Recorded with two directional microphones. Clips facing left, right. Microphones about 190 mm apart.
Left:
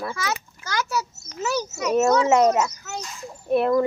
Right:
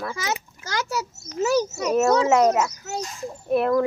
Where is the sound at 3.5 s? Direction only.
Centre (ahead or behind).